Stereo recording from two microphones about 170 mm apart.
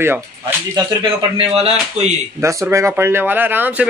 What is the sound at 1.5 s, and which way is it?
Speech, 35° right (ahead or behind).